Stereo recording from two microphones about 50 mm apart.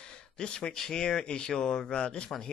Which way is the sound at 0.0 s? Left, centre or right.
Centre.